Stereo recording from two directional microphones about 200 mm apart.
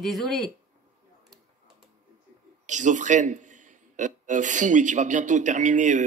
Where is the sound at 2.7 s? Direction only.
40° right (ahead or behind).